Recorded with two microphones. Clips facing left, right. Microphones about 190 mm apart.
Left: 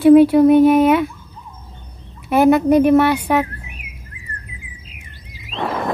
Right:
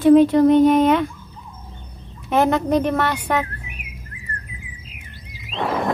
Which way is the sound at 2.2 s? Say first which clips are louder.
Left 5 dB; 10° left (ahead or behind).